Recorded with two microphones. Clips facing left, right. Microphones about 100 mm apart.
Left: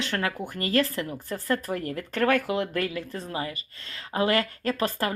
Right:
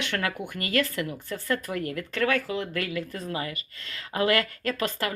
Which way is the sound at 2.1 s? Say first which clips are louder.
Left 3 dB; 45° left (ahead or behind).